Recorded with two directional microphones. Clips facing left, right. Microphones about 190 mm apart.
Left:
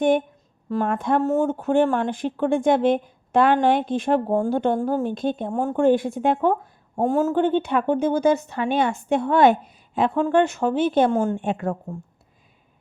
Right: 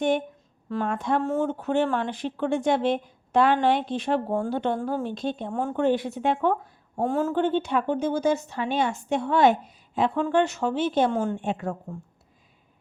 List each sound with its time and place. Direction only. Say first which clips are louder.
0.7 s speech: left 4 dB; 50° left (ahead or behind)